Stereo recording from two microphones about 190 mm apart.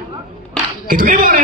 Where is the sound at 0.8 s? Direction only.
45° right (ahead or behind).